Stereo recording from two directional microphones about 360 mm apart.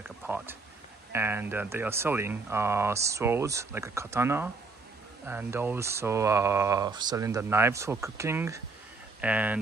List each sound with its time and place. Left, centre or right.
1.1 s speech: centre